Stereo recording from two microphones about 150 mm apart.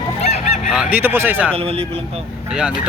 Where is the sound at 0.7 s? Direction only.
10° right (ahead or behind).